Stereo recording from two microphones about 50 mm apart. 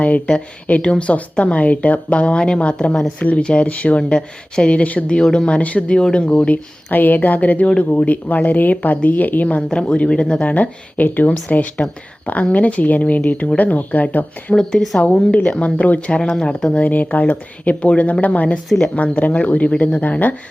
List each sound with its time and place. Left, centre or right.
0.3 s speech: left
5.5 s speech: left
6.9 s speech: left
9.6 s speech: centre
10.5 s speech: left
14.5 s speech: centre
17.1 s speech: left